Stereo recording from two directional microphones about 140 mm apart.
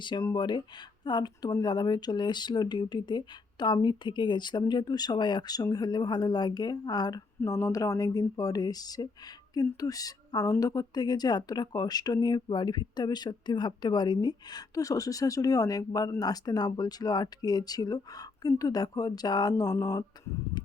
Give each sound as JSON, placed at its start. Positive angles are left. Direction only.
{"t": 0.0, "sound": "speech", "side_deg": 30}